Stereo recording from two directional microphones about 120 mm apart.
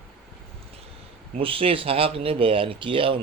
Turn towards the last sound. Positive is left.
turn(degrees=-45)  # may be behind; listen again after turning